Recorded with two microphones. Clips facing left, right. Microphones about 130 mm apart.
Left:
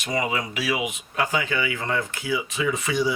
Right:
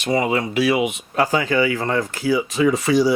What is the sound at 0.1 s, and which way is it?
Speech, 30° right (ahead or behind).